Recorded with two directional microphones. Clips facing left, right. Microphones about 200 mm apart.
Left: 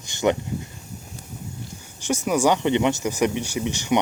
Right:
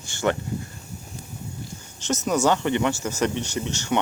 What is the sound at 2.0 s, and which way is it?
Speech, 10° left (ahead or behind).